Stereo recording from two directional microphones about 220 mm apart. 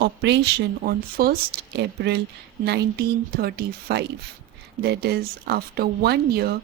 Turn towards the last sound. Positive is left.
turn(degrees=-45)  # may be behind; listen again after turning